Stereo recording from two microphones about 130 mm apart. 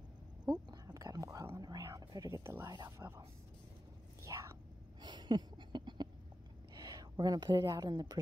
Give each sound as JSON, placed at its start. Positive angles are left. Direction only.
{"t": 0.5, "sound": "whispering", "side_deg": -30}
{"t": 5.0, "sound": "a sound", "side_deg": -35}
{"t": 6.7, "sound": "speech", "side_deg": -30}